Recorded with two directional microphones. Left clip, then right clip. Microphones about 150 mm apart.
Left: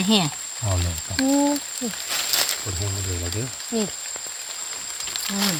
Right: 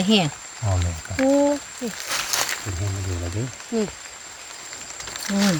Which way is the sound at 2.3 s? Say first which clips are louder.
Left 3 dB; 30° right (ahead or behind).